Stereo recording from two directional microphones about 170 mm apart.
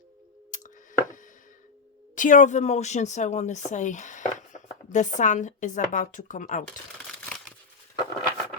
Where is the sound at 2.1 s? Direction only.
50° left (ahead or behind).